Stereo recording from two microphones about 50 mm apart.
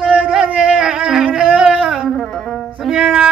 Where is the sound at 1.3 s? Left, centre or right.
Right.